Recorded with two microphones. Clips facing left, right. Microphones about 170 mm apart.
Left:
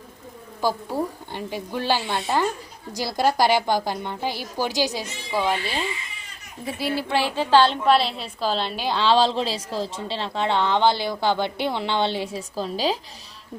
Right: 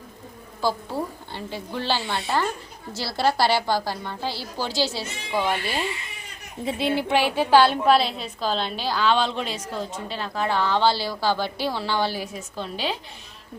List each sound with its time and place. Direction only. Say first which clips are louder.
0.6 s a woman's voice: left 1 dB; 15° left (ahead or behind)
5.4 s a woman's voice: left 1 dB; 5° right (ahead or behind)
6.7 s a woman's voice: right 2 dB; 25° right (ahead or behind); by 8.9 s 5° left (ahead or behind)
8.9 s a woman's voice: left 3 dB; 30° left (ahead or behind)